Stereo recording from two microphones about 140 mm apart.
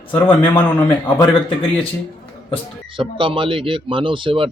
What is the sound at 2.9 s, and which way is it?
Speech, 40° right (ahead or behind).